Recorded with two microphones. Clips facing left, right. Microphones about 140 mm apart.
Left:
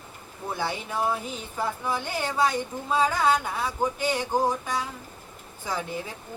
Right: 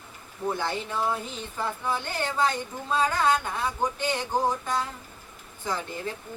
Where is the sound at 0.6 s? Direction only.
10° left (ahead or behind).